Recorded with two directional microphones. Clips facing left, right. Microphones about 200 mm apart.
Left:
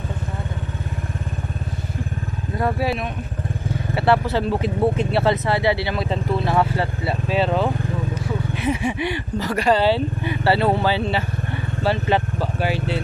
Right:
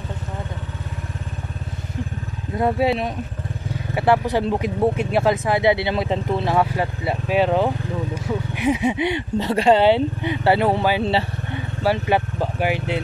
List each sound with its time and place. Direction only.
2.5 s speech: 20° right (ahead or behind)
11.1 s vehicle: 30° right (ahead or behind)
11.8 s speech: 10° right (ahead or behind)